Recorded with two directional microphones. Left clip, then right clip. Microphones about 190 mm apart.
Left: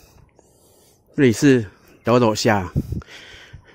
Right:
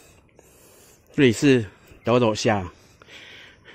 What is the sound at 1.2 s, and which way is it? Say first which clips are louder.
Speech: left 2 dB; 20° left (ahead or behind).